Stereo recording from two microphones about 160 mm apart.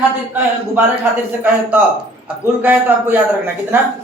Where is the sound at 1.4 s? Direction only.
10° right (ahead or behind).